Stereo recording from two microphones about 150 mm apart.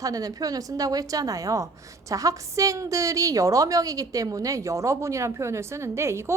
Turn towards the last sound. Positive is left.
turn(degrees=-20)  # may be behind; listen again after turning